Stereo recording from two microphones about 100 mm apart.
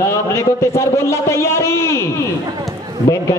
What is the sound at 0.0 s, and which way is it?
A man's voice, 30° left (ahead or behind).